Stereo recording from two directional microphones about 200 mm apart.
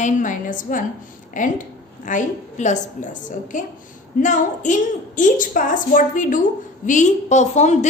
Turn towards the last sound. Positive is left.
turn(degrees=35)  # may be behind; listen again after turning